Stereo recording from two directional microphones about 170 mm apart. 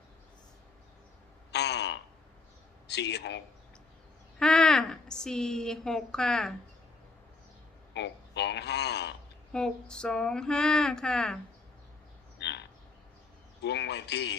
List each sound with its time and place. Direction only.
1.5 s a sound: 80° left
2.8 s speech: 80° left
4.4 s speech: 5° left (ahead or behind)
7.9 s a man's voice: 90° left
9.5 s a sound: 5° left (ahead or behind)
12.4 s frog: 90° left
13.6 s a man's voice: 85° left